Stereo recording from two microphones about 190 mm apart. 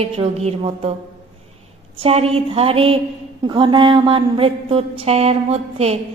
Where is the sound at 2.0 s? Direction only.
30° right (ahead or behind).